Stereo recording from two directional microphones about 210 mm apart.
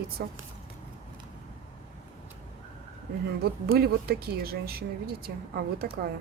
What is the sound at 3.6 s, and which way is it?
A woman's voice, 45° right (ahead or behind).